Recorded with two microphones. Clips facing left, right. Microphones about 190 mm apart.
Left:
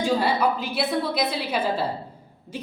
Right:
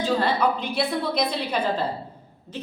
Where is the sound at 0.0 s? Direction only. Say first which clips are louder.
Even; 10° left (ahead or behind).